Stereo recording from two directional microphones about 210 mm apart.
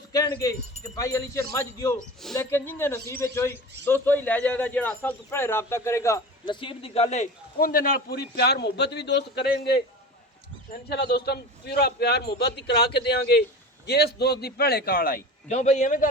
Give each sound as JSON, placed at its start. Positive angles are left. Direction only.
{"t": 0.1, "sound": "a man's voice", "side_deg": 15}
{"t": 10.8, "sound": "a man's voice", "side_deg": 50}